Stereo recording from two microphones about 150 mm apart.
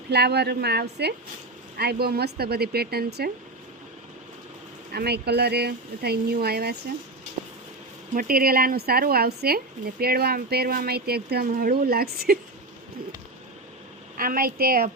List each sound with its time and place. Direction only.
0.1 s speech: 90° right
4.9 s speech: 90° right
8.1 s speech: 75° right (ahead or behind); by 12.4 s 90° right
14.2 s a woman's voice: 70° right (ahead or behind)